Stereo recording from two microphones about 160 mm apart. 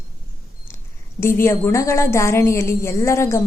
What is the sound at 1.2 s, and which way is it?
A woman's voice, 15° left (ahead or behind).